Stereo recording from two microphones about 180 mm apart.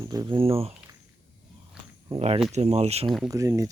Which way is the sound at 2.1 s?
35° right (ahead or behind).